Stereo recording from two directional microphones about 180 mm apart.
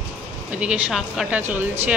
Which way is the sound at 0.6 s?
5° right (ahead or behind).